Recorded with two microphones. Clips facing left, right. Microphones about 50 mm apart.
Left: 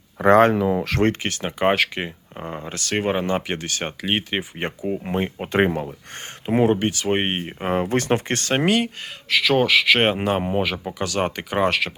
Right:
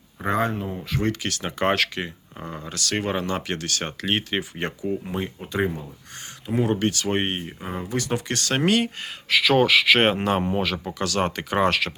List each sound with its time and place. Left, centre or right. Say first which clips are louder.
0.2 s speech: left 10 dB; left
1.2 s speech: left 3 dB; left
5.0 s speech: left 5 dB; left
5.4 s speech: left 7 dB; left
6.4 s speech: left 5 dB; left
6.7 s speech: left 2 dB; centre
7.3 s speech: left 5 dB; left
7.7 s speech: left 7 dB; left
8.6 s speech: left 1 dB; centre